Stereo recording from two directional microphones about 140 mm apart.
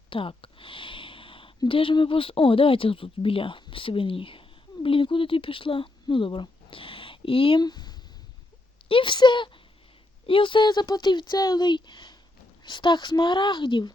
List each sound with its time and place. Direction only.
0.1 s speech: 40° left (ahead or behind)